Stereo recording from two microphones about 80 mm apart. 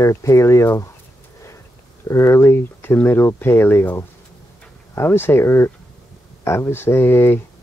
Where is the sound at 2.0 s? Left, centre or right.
Left.